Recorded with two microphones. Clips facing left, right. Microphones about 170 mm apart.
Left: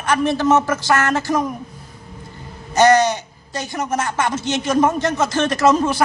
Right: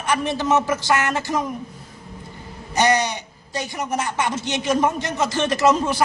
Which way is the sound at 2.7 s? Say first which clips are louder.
Left 6 dB; 45° left (ahead or behind).